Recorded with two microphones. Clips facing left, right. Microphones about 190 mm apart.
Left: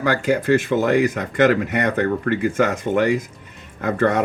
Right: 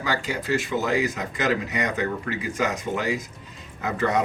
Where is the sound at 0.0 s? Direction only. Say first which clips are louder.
Left 9 dB; 55° left (ahead or behind).